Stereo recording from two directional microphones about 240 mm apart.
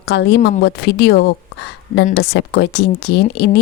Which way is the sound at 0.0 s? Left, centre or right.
Left.